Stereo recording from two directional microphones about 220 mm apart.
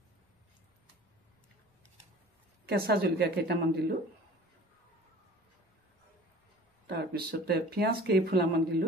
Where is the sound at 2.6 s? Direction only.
45° right (ahead or behind).